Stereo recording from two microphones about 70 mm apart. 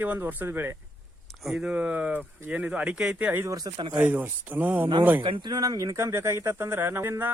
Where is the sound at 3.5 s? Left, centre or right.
Right.